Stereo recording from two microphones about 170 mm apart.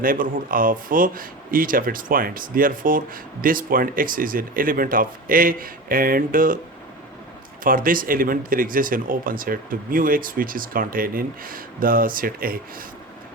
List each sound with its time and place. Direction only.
0.0 s speech: 55° right (ahead or behind)
7.6 s speech: 55° right (ahead or behind)